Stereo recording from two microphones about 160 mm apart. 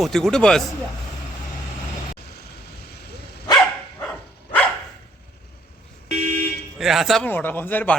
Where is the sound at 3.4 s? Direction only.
25° left (ahead or behind).